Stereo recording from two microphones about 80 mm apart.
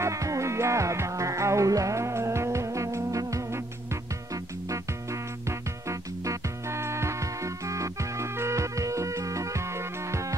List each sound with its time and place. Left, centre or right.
0.0 s music: right